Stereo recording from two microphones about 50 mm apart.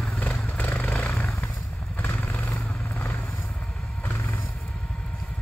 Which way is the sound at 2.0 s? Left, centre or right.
Left.